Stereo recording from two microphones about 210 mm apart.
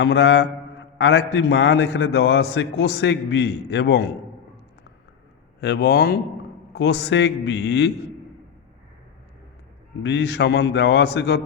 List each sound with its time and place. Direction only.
0.0 s a man's voice: 60° left (ahead or behind)
5.5 s a man's voice: 50° left (ahead or behind)
10.0 s a man's voice: 55° left (ahead or behind)